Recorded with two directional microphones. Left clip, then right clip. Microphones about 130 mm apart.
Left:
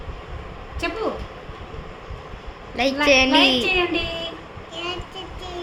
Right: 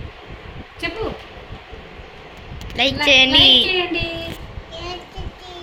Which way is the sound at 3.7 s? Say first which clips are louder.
Right 1 dB; 25° left (ahead or behind).